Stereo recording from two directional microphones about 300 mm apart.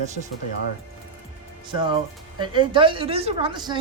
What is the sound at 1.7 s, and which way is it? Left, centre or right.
A woman's voice, centre.